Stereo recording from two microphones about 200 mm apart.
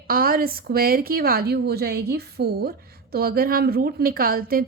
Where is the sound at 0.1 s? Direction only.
45° right (ahead or behind).